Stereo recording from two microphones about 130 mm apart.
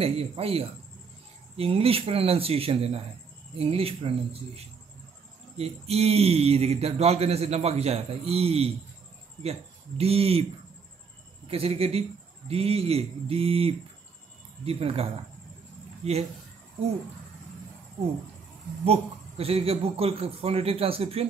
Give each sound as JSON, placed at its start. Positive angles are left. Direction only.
{"t": 0.0, "sound": "speech", "side_deg": -50}
{"t": 11.4, "sound": "speech", "side_deg": -50}
{"t": 18.9, "sound": "speech", "side_deg": -50}